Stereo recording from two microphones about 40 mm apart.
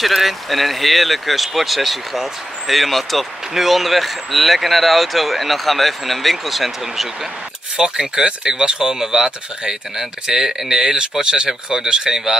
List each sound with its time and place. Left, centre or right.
0.0 s speech: centre
7.7 s speech: centre